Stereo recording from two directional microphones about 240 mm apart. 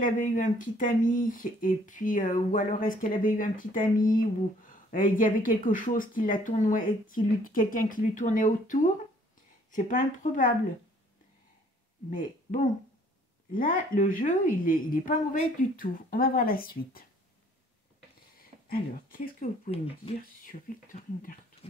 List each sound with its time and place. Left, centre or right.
0.0 s speech: left
12.1 s speech: left
18.7 s speech: left
21.6 s dog: left